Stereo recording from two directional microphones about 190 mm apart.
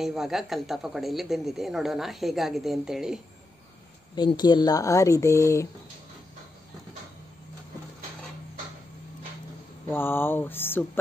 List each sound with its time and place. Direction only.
0.0 s a woman's voice: centre (ahead or behind)
4.1 s speech: 25° left (ahead or behind)
9.8 s speech: 10° left (ahead or behind)